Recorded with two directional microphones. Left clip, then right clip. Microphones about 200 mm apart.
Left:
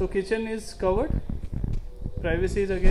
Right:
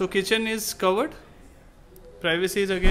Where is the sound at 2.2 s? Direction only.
20° right (ahead or behind).